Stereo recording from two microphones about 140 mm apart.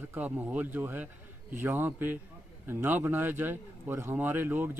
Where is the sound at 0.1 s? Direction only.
10° right (ahead or behind).